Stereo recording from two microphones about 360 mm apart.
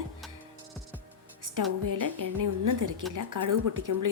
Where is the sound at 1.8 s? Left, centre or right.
Right.